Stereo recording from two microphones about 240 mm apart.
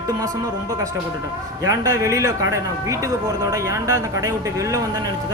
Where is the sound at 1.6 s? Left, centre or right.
Centre.